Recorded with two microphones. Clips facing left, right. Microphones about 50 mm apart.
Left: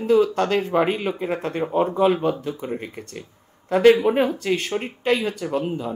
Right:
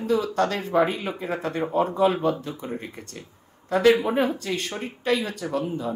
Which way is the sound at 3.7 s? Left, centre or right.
Left.